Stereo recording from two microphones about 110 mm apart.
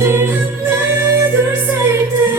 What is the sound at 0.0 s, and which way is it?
Music, 20° right (ahead or behind).